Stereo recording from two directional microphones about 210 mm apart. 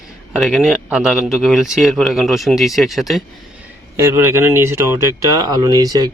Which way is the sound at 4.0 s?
10° right (ahead or behind).